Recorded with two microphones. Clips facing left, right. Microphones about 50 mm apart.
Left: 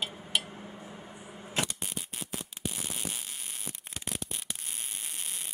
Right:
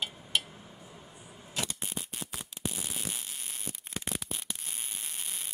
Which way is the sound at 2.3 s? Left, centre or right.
Centre.